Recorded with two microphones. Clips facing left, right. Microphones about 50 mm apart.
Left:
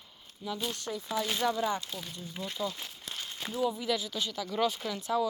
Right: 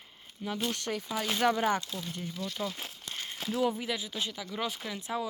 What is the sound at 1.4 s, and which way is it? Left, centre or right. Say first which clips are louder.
Speech: right 5 dB; right.